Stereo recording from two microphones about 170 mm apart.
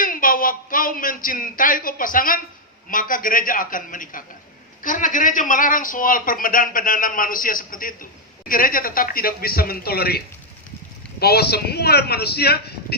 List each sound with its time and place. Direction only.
0.0 s a man's voice: 55° left (ahead or behind)